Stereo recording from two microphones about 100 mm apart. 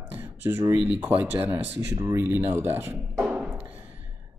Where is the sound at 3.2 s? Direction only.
10° right (ahead or behind).